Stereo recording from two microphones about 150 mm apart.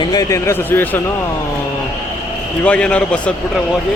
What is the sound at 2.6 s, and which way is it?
Speech, 5° left (ahead or behind).